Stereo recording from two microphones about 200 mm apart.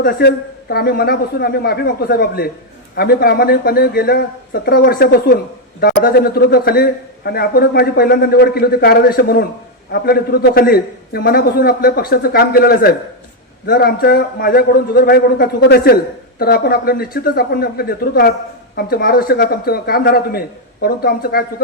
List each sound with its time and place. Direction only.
0.0 s a man's voice: 50° left (ahead or behind)